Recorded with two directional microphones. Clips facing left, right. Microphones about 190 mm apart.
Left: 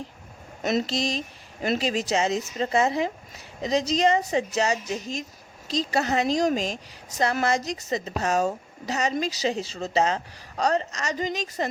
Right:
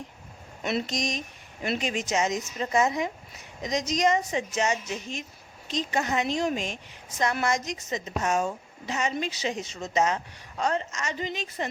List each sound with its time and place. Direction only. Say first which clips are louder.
0.9 s a woman's voice: left 3 dB; 30° left (ahead or behind)